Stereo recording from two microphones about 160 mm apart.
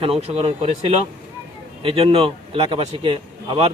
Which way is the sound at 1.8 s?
35° right (ahead or behind).